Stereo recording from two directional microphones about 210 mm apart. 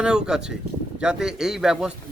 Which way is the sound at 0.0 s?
5° right (ahead or behind).